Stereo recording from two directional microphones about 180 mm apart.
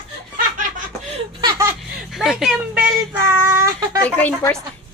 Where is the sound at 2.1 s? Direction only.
Centre (ahead or behind).